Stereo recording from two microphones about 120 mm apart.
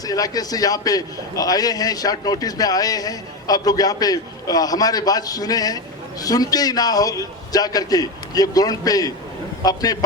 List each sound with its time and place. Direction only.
0.0 s a man's voice: 30° left (ahead or behind)